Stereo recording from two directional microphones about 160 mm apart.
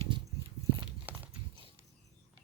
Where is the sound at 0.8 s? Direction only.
10° right (ahead or behind).